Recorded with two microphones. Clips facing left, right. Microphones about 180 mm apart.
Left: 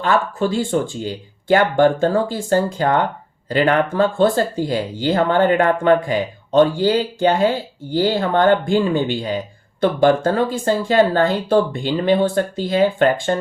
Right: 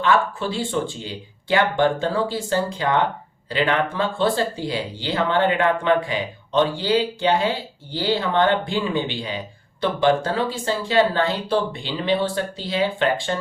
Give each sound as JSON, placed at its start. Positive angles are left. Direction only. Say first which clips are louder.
{"t": 0.0, "sound": "speech", "louder": "left 2 dB", "side_deg": 45}